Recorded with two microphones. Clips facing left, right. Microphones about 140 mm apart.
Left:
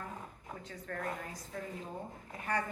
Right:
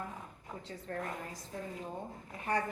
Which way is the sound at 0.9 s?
30° right (ahead or behind).